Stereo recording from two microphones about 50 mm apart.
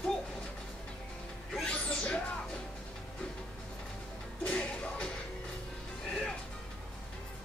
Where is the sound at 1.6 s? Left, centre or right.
Left.